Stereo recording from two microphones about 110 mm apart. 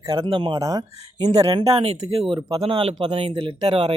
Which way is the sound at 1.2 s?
80° right.